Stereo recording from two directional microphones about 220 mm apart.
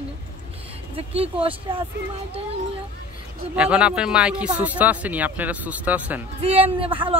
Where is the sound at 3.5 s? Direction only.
5° right (ahead or behind).